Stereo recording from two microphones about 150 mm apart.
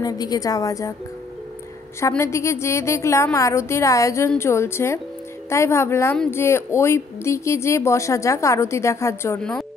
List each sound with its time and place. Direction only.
0.0 s speech: 25° left (ahead or behind)
2.0 s a woman's voice: 20° left (ahead or behind)
9.4 s speech: 5° left (ahead or behind)